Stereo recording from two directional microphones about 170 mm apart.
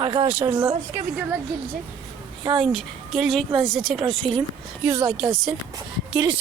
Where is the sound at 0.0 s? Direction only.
30° right (ahead or behind).